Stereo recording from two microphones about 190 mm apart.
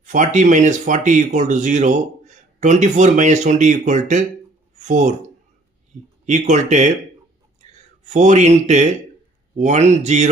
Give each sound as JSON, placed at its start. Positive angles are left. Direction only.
{"t": 0.0, "sound": "speech", "side_deg": -40}